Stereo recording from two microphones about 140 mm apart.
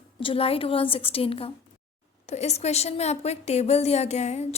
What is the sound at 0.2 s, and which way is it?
A woman's voice, 40° left (ahead or behind).